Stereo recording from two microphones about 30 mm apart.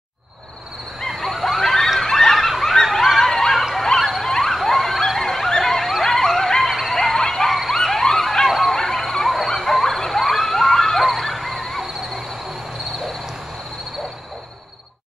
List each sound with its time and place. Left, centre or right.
1.2 s goose: centre
2.0 s fowl: centre
3.7 s emergency vehicle: centre
4.0 s emergency vehicle: centre
4.3 s a sound: centre
5.2 s dog: centre
5.6 s a sound: centre
7.2 s bow-wow: centre
7.7 s police car: centre
8.5 s bow-wow: centre
8.7 s a sound: centre